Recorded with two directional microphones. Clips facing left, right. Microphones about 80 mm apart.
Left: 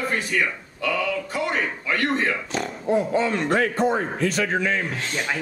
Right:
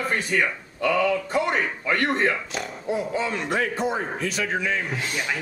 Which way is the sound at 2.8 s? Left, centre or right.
Left.